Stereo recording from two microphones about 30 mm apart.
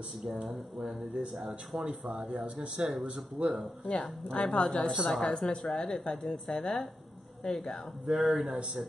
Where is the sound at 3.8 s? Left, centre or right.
Left.